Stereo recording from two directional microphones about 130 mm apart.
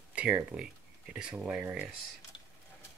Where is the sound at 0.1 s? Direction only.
10° right (ahead or behind).